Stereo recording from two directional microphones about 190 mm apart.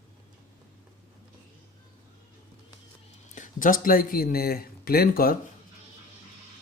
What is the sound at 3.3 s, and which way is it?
Speech, 40° left (ahead or behind).